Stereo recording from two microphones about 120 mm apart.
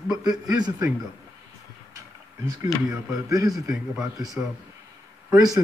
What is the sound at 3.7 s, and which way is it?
Speech, 5° right (ahead or behind).